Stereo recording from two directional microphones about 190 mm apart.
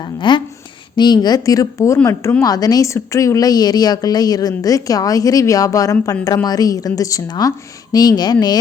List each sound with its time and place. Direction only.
0.0 s speech: 25° left (ahead or behind)